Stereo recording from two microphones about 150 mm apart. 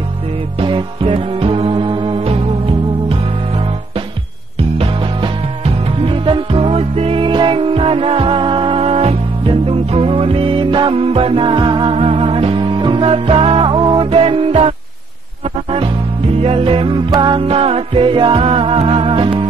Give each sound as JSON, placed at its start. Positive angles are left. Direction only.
{"t": 0.6, "sound": "music", "side_deg": -35}
{"t": 16.3, "sound": "music", "side_deg": -40}